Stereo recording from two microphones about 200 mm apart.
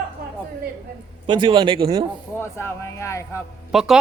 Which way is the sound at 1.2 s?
25° right (ahead or behind).